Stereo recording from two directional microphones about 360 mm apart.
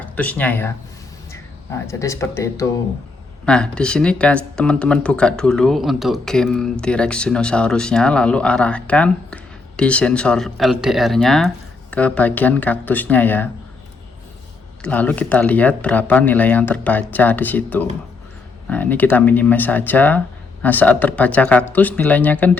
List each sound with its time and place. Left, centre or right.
0.0 s speech: centre
1.9 s speech: centre
14.8 s speech: centre